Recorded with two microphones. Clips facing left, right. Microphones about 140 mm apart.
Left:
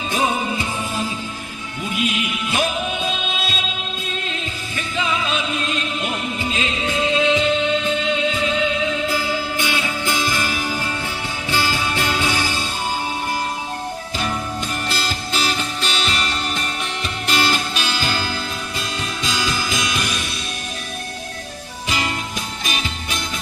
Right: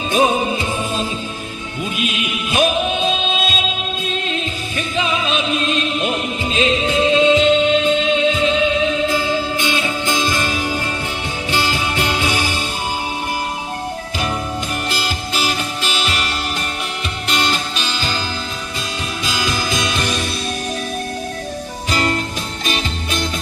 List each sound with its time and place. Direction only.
0.1 s music: 20° right (ahead or behind)
14.9 s music: 15° right (ahead or behind)
17.3 s music: 5° left (ahead or behind)
19.2 s music: 15° right (ahead or behind)